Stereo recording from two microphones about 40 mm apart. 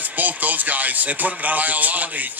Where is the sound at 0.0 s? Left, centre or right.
Right.